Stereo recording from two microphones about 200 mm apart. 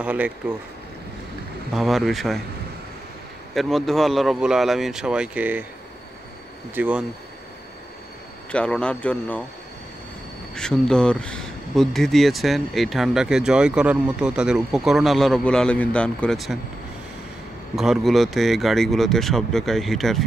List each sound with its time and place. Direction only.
0.0 s speech: 5° right (ahead or behind)
1.7 s speech: centre (ahead or behind)
3.5 s speech: centre (ahead or behind)
6.7 s speech: 5° right (ahead or behind)
8.5 s speech: 5° left (ahead or behind)
10.5 s speech: 5° left (ahead or behind)
17.7 s speech: centre (ahead or behind)